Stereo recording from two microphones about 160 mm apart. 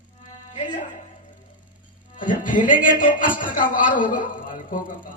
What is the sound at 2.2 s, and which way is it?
A woman's voice, 55° left (ahead or behind).